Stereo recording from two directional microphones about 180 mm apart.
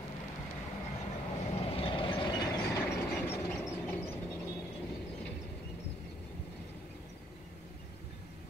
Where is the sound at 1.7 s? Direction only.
30° left (ahead or behind).